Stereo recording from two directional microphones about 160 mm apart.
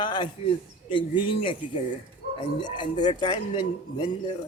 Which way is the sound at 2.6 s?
30° left (ahead or behind).